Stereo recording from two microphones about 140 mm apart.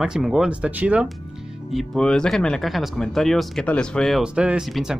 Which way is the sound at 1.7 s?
5° left (ahead or behind).